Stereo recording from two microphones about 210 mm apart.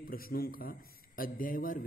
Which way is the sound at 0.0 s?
45° left (ahead or behind).